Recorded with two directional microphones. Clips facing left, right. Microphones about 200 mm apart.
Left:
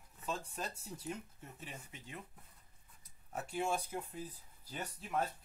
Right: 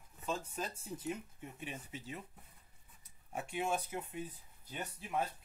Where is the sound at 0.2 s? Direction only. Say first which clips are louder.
Right 2 dB; centre (ahead or behind).